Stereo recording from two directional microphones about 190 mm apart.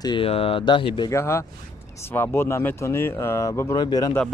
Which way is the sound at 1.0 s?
15° left (ahead or behind).